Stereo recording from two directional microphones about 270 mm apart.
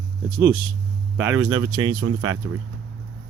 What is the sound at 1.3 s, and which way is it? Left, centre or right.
Speech, right.